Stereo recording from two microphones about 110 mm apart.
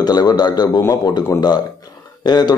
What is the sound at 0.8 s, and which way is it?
A man's voice, 30° left (ahead or behind).